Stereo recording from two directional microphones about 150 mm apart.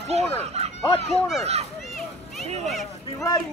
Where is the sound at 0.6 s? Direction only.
45° right (ahead or behind).